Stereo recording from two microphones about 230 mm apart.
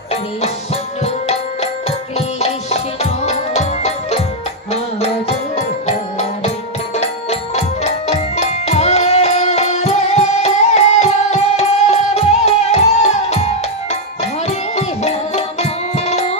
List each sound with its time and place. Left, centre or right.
0.1 s music: left